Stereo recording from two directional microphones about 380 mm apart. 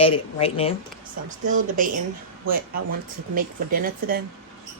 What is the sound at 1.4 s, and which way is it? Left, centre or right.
Speech, right.